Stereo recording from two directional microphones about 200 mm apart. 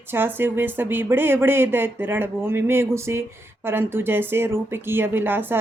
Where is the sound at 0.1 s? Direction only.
10° right (ahead or behind).